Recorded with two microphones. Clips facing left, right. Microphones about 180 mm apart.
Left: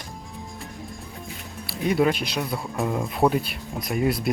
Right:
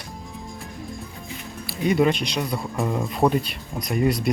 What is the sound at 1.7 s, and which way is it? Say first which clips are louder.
Speech: right 2 dB; centre (ahead or behind).